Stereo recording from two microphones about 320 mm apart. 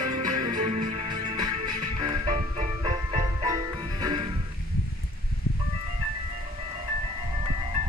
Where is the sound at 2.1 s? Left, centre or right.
Centre.